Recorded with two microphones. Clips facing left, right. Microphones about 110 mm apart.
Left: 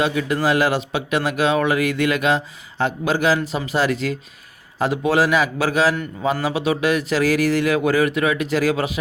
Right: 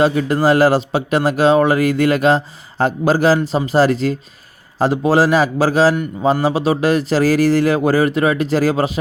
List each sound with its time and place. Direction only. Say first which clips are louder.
0.0 s speech: right 5 dB; 35° right (ahead or behind)